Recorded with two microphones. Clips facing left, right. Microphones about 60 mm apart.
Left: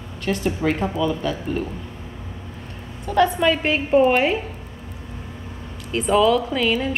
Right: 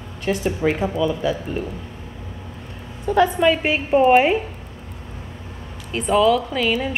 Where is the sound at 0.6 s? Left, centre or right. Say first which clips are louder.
Right 1 dB; centre.